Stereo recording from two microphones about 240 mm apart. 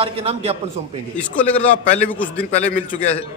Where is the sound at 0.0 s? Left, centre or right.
Right.